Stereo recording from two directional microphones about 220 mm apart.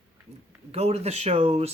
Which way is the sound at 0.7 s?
30° right (ahead or behind).